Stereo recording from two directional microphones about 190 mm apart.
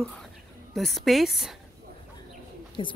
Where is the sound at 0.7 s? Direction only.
Centre (ahead or behind).